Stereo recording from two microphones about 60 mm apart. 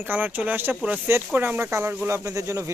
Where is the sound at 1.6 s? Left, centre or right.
Right.